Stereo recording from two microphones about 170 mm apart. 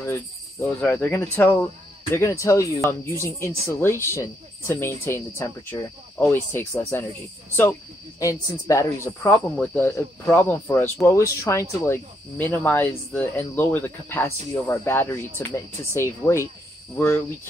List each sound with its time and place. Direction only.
0.0 s speech: 15° left (ahead or behind)
8.2 s speech: 20° left (ahead or behind)